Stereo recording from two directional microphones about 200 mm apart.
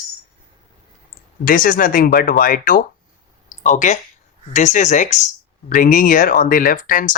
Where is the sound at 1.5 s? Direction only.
45° left (ahead or behind).